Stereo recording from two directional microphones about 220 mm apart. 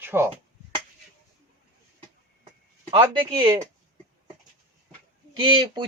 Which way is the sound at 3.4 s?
20° right (ahead or behind).